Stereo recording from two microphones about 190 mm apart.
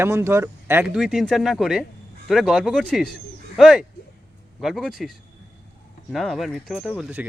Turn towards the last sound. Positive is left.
turn(degrees=-5)  # may be behind; listen again after turning